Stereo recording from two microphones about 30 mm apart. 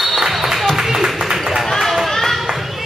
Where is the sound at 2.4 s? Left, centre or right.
Centre.